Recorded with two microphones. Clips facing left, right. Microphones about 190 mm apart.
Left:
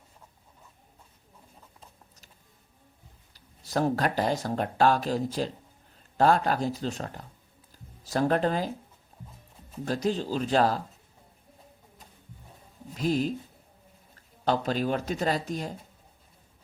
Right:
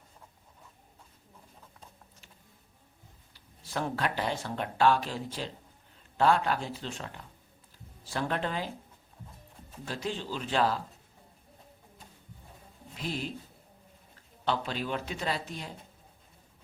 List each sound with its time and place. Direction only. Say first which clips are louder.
3.3 s speech: left 6 dB; 40° left (ahead or behind)
9.8 s speech: left 8 dB; 40° left (ahead or behind)
13.0 s speech: left 9 dB; 40° left (ahead or behind)
14.4 s speech: left 6 dB; 40° left (ahead or behind)